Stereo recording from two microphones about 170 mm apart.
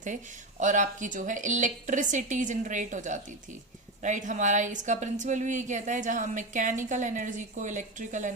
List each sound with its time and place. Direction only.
0.6 s speech: 45° right (ahead or behind)